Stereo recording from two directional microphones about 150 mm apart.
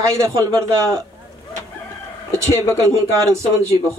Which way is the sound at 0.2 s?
20° right (ahead or behind).